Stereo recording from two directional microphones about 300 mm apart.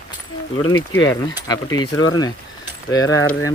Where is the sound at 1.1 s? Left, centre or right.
Centre.